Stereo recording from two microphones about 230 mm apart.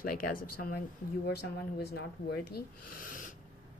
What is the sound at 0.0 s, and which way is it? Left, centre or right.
Speech, left.